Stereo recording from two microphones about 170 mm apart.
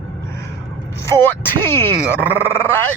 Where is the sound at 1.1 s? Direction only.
15° left (ahead or behind).